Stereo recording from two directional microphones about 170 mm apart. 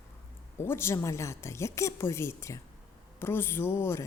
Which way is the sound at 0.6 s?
15° left (ahead or behind).